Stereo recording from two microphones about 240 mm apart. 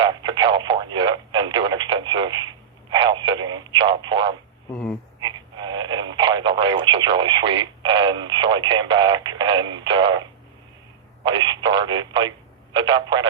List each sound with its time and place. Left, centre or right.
0.0 s radio: centre
2.9 s a sound: centre
4.7 s speech: centre
5.2 s speech: centre